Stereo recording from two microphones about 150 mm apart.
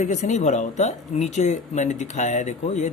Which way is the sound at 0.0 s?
50° left (ahead or behind).